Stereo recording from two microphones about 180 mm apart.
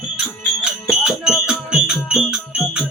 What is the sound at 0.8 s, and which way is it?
Music, 5° right (ahead or behind).